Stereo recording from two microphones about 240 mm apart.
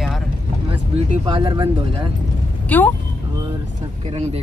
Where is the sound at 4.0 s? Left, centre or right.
Right.